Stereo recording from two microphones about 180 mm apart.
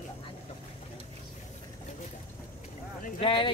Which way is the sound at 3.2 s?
25° left (ahead or behind).